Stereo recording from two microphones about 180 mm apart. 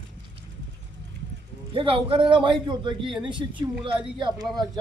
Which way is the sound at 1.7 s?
30° right (ahead or behind).